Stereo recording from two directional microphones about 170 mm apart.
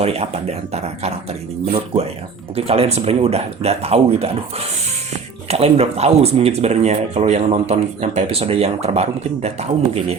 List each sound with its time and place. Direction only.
0.0 s speech: 35° right (ahead or behind)